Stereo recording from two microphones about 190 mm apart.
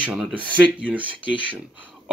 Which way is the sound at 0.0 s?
5° right (ahead or behind).